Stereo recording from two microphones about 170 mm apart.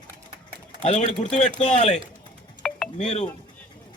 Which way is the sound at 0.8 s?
45° left (ahead or behind).